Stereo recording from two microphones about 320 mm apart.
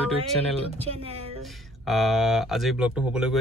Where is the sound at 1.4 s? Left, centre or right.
Centre.